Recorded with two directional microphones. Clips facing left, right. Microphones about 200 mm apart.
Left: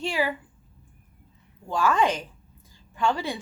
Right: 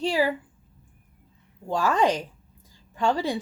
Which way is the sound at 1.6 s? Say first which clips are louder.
Right 1 dB; 40° right (ahead or behind).